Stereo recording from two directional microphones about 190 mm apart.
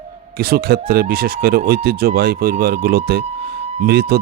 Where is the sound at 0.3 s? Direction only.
55° right (ahead or behind).